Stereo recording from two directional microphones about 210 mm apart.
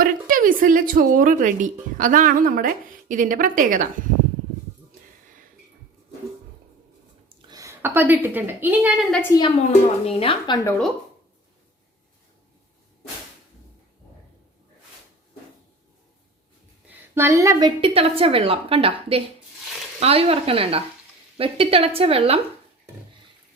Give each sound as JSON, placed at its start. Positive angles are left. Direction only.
{"t": 0.0, "sound": "speech", "side_deg": -40}
{"t": 7.3, "sound": "a woman's voice", "side_deg": -20}
{"t": 9.2, "sound": "a woman's voice", "side_deg": 15}
{"t": 9.6, "sound": "speech", "side_deg": 30}
{"t": 17.2, "sound": "a woman's voice", "side_deg": -15}